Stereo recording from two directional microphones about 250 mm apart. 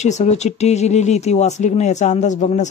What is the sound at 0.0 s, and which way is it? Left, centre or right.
Speech, left.